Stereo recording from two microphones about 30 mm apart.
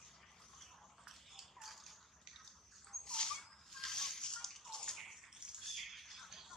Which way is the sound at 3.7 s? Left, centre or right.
Centre.